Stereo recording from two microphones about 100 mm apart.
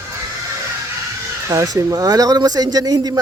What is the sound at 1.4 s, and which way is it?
Speech, 30° right (ahead or behind).